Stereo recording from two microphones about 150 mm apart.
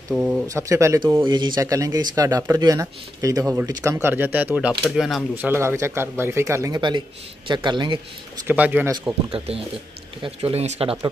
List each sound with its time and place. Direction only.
0.1 s speech: 10° right (ahead or behind)
1.2 s speech: 30° right (ahead or behind)
4.1 s speech: 10° right (ahead or behind)
5.3 s speech: 15° right (ahead or behind)
7.4 s speech: 30° right (ahead or behind)
8.5 s speech: 10° right (ahead or behind)
8.9 s speech: 30° right (ahead or behind)
10.2 s speech: 40° right (ahead or behind)